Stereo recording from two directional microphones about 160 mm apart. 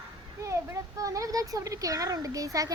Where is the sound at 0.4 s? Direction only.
20° right (ahead or behind).